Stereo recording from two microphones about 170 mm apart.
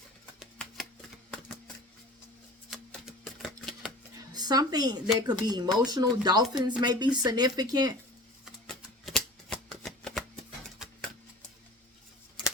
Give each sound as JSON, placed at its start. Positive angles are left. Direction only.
{"t": 1.3, "sound": "a sound", "side_deg": 5}
{"t": 4.3, "sound": "speech", "side_deg": -25}
{"t": 8.4, "sound": "shuffling cards", "side_deg": 0}